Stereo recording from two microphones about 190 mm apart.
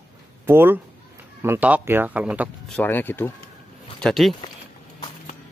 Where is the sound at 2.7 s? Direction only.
10° left (ahead or behind).